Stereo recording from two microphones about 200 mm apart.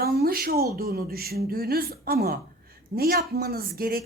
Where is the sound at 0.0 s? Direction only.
50° right (ahead or behind).